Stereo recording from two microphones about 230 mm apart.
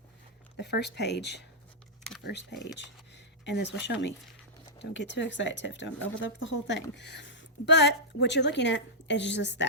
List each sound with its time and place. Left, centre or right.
0.5 s a woman's voice: left